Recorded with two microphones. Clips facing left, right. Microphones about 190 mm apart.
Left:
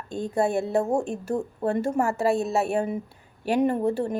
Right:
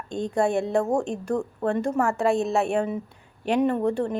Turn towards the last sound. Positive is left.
turn(degrees=5)  # may be behind; listen again after turning